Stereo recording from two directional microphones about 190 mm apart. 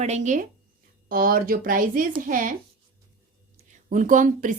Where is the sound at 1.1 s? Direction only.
50° right (ahead or behind).